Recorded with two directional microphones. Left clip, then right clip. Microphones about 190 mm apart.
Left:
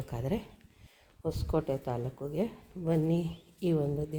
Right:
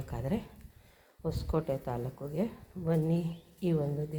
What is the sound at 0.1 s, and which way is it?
Speech, 20° left (ahead or behind).